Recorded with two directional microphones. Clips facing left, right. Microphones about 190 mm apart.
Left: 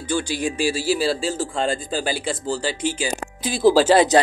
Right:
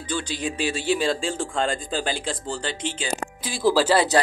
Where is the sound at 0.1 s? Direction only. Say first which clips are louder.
Left 5 dB; 10° left (ahead or behind).